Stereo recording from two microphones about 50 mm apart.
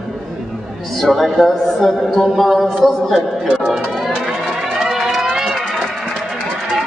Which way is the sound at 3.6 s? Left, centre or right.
Centre.